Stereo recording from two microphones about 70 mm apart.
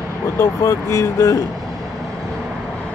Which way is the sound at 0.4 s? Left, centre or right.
Left.